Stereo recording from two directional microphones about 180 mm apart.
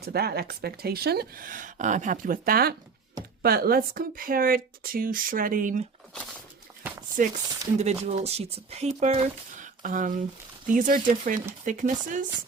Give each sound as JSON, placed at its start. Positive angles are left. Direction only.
{"t": 0.0, "sound": "speech", "side_deg": -60}
{"t": 7.2, "sound": "speech", "side_deg": -50}
{"t": 7.8, "sound": "speech", "side_deg": -35}